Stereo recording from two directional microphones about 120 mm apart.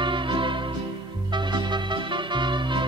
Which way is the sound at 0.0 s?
40° right (ahead or behind).